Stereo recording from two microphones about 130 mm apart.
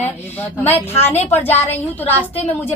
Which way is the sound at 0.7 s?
15° left (ahead or behind).